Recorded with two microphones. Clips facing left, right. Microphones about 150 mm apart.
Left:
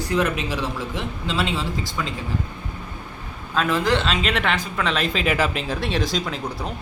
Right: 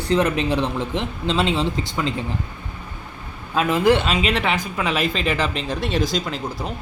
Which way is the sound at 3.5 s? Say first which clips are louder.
Right 4 dB; 15° right (ahead or behind).